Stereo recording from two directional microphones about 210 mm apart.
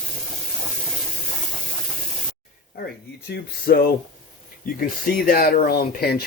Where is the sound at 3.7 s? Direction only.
45° left (ahead or behind).